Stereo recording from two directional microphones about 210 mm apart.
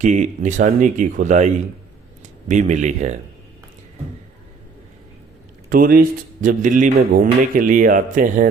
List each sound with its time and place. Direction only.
0.0 s speech: 35° right (ahead or behind)
5.6 s speech: 45° right (ahead or behind)